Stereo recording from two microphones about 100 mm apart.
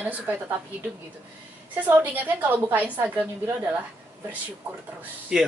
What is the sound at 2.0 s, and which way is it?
A woman's voice, 20° right (ahead or behind).